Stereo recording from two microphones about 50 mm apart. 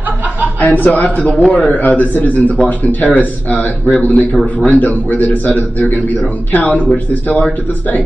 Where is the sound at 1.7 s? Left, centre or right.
Left.